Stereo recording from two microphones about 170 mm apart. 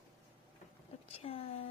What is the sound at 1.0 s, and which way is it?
Speech, 35° left (ahead or behind).